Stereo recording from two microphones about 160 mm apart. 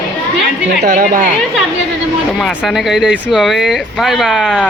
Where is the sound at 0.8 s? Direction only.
60° right (ahead or behind).